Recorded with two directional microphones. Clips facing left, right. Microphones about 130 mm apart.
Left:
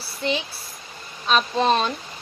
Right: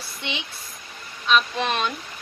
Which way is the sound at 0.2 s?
35° left (ahead or behind).